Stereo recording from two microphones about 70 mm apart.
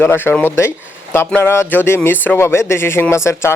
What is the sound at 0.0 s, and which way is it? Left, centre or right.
Speech, left.